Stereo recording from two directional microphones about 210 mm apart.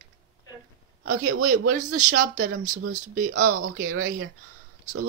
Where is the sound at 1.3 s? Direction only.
90° right.